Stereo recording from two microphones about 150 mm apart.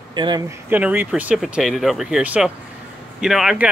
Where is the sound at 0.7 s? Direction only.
10° right (ahead or behind).